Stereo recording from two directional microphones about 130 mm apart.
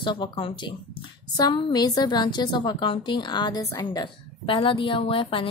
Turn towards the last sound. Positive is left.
turn(degrees=45)  # may be behind; listen again after turning